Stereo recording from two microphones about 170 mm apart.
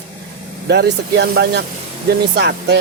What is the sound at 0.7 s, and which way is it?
Speech, 75° right (ahead or behind).